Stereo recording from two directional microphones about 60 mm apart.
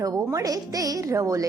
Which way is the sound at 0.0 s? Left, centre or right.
Right.